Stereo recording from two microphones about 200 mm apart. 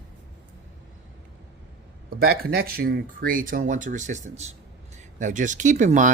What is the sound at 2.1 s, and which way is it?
Speech, 50° right (ahead or behind).